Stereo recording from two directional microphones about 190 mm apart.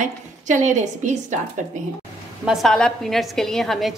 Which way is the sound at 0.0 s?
40° right (ahead or behind).